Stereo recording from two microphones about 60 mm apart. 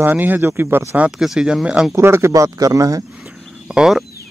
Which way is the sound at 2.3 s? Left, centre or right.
Right.